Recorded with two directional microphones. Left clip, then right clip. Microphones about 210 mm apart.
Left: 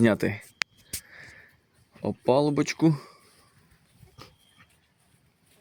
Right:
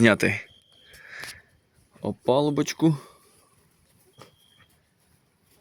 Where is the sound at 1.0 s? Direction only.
Centre (ahead or behind).